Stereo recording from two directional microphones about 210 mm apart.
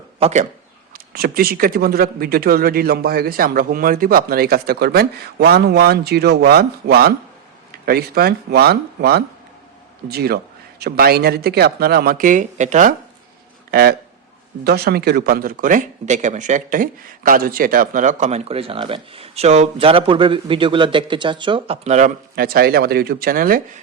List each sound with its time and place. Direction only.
0.2 s a man's voice: 30° right (ahead or behind)
0.9 s a man's voice: 45° right (ahead or behind)
13.7 s speech: 45° right (ahead or behind)